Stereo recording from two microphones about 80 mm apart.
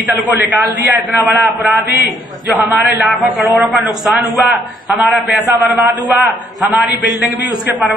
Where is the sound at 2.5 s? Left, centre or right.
Right.